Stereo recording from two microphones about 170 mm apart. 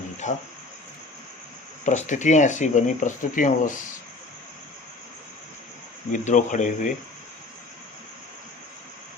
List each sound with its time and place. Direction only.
0.2 s speech: 45° left (ahead or behind)
1.8 s speech: 45° left (ahead or behind)
6.1 s speech: 50° left (ahead or behind)